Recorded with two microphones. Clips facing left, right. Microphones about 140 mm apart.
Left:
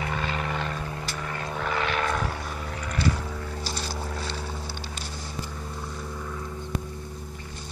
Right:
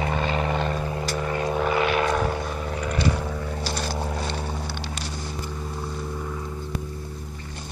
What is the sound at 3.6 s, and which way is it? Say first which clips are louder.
Vehicle: right 6 dB; 60° right (ahead or behind).